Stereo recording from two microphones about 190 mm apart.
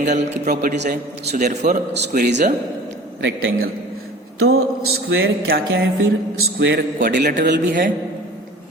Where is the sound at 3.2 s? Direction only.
65° right (ahead or behind).